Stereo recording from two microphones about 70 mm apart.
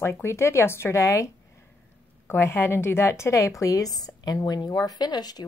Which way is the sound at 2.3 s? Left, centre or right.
Left.